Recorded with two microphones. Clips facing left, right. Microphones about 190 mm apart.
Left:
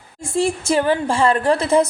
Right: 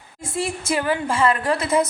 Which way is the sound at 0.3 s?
30° left (ahead or behind).